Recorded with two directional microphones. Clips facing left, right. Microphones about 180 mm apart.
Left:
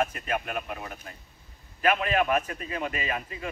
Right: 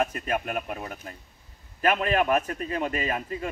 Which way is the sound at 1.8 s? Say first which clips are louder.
Right 1 dB; 40° right (ahead or behind).